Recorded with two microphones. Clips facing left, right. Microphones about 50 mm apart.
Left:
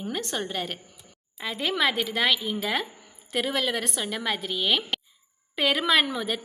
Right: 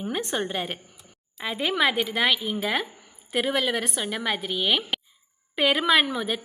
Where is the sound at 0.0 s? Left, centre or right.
Centre.